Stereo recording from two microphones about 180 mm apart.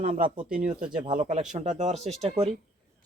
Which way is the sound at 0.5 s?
50° right (ahead or behind).